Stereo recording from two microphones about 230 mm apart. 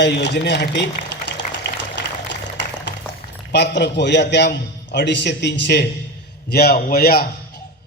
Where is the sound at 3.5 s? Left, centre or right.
Left.